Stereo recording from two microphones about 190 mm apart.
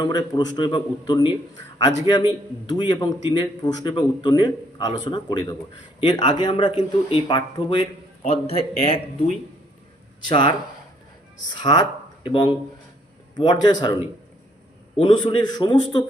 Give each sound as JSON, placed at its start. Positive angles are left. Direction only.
{"t": 0.0, "sound": "a man's voice", "side_deg": 20}
{"t": 14.9, "sound": "a man's voice", "side_deg": 30}